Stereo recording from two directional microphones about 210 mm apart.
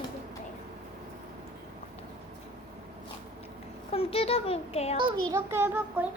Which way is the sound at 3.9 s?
25° left (ahead or behind).